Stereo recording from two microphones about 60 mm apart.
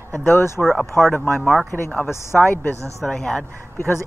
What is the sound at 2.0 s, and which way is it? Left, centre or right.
Speech, left.